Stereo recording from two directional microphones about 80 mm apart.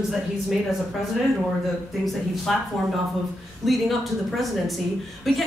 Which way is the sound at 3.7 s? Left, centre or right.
Centre.